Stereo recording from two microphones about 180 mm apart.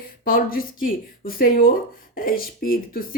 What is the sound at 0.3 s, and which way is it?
Speech, 50° left (ahead or behind).